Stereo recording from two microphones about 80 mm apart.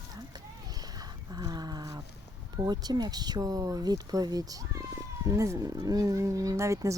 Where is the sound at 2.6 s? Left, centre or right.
Right.